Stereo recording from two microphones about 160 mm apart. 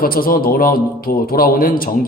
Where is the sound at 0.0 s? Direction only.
65° left (ahead or behind).